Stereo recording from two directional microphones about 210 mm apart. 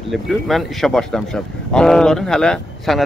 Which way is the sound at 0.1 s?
Centre (ahead or behind).